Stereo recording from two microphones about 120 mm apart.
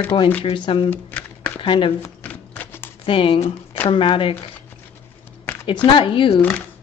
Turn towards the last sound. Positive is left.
turn(degrees=15)  # may be behind; listen again after turning